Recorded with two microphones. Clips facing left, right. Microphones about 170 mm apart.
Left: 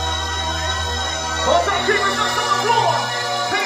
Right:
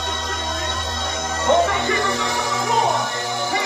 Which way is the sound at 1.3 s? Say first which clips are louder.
Even; 65° left (ahead or behind).